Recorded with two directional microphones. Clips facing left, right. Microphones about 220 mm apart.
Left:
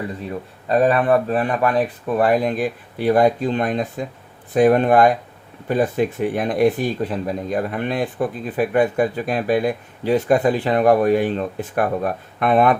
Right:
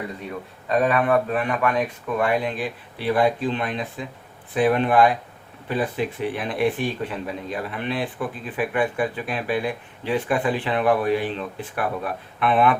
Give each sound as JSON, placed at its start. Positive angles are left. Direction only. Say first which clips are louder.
{"t": 0.7, "sound": "speech", "louder": "left 4 dB", "side_deg": 35}